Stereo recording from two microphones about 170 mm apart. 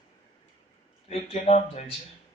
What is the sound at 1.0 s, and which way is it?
Speech, 40° left (ahead or behind).